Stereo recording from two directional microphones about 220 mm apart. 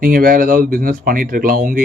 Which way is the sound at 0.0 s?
40° right (ahead or behind).